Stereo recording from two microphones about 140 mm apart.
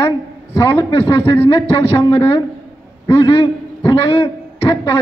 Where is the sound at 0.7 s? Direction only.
20° left (ahead or behind).